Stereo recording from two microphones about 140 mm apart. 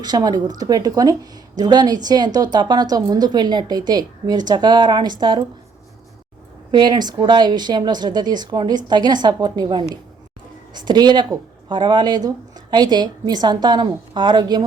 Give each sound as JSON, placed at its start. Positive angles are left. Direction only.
{"t": 0.0, "sound": "a woman's voice", "side_deg": -30}
{"t": 6.7, "sound": "speech", "side_deg": -30}